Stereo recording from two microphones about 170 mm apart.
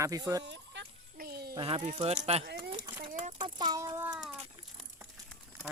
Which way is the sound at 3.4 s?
25° right (ahead or behind).